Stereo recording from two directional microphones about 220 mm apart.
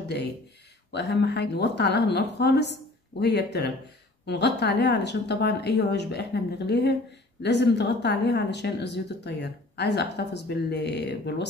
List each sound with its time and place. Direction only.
0.9 s a woman's voice: 50° left (ahead or behind)